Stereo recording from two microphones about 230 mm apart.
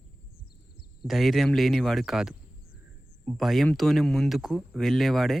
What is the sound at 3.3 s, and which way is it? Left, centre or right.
Speech, centre.